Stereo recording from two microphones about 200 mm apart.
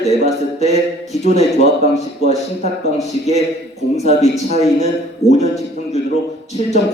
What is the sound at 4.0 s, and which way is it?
A man's voice, 35° left (ahead or behind).